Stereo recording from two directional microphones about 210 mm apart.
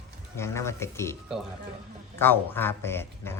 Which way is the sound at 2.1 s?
10° left (ahead or behind).